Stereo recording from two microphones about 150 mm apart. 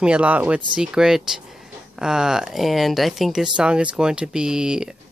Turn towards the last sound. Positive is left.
turn(degrees=-5)  # may be behind; listen again after turning